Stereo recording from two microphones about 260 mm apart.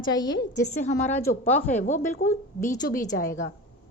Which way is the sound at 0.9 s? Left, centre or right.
Left.